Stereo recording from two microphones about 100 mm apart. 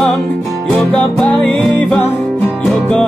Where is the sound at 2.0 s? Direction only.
20° left (ahead or behind).